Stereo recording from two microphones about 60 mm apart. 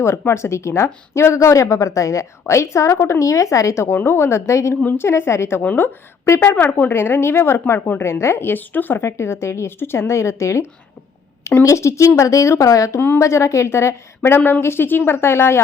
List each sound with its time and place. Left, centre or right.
0.0 s speech: left
3.8 s speech: left
4.9 s speech: left
6.4 s speech: left
9.0 s speech: left
13.1 s speech: left
14.3 s speech: left
14.6 s speech: left